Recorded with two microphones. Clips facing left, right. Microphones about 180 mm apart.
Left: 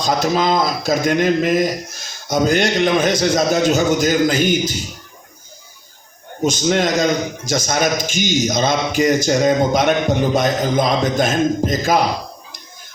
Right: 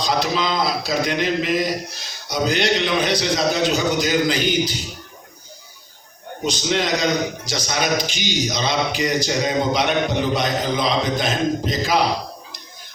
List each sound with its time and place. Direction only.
0.0 s a man's voice: 45° left (ahead or behind)
6.4 s a man's voice: 45° left (ahead or behind)